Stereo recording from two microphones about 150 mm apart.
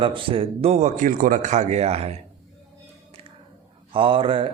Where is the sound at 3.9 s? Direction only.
35° right (ahead or behind).